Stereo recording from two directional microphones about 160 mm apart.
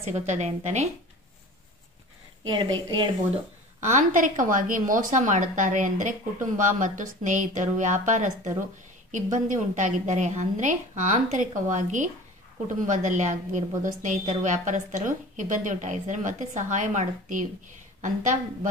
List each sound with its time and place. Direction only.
0.0 s a woman's voice: 45° right (ahead or behind)
2.4 s a woman's voice: 30° right (ahead or behind)
3.8 s a woman's voice: 50° right (ahead or behind)